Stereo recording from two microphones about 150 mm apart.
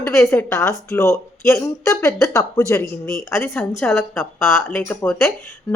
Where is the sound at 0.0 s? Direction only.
15° left (ahead or behind).